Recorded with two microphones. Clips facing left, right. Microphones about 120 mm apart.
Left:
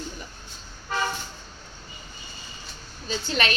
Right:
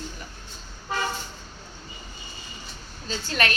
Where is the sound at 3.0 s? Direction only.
20° left (ahead or behind).